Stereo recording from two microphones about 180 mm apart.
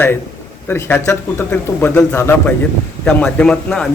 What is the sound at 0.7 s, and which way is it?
A man's voice, 10° left (ahead or behind).